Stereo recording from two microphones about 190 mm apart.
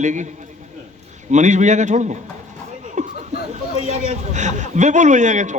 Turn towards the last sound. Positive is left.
turn(degrees=-40)  # may be behind; listen again after turning